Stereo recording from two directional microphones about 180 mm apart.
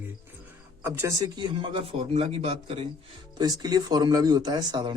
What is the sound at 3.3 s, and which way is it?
Speech, 20° right (ahead or behind).